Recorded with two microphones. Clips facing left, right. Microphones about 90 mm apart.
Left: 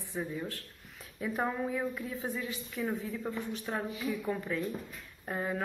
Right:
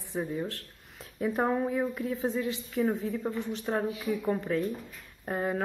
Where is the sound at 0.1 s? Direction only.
20° right (ahead or behind); by 4.6 s 35° right (ahead or behind).